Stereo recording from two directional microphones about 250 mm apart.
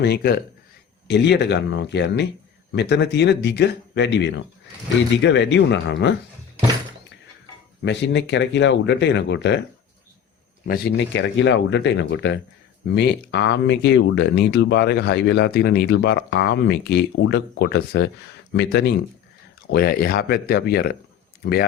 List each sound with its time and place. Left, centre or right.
0.0 s speech: left
7.9 s speech: left
10.7 s speech: left